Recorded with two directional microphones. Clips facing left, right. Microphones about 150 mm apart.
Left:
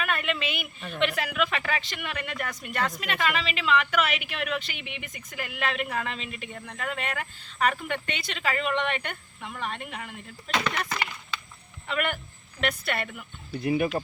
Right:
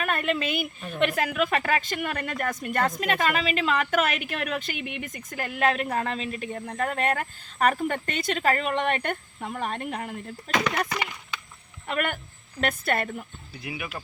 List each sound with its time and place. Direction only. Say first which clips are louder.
0.0 s a woman's voice: right 3 dB; 40° right (ahead or behind)
10.8 s speech: right 1 dB; 15° right (ahead or behind)
11.9 s a woman's voice: right 1 dB; 45° right (ahead or behind)
13.6 s speech: left 10 dB; 40° left (ahead or behind)